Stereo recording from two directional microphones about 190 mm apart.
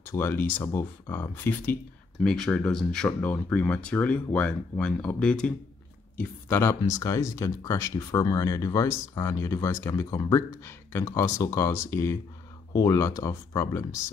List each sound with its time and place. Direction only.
0.0 s speech: 10° left (ahead or behind)